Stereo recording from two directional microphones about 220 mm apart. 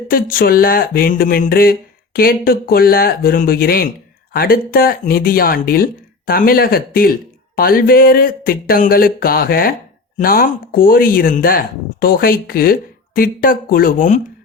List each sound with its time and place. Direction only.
0.1 s speech: 40° left (ahead or behind)